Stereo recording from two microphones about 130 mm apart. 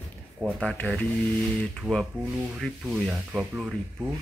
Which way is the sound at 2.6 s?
Centre (ahead or behind).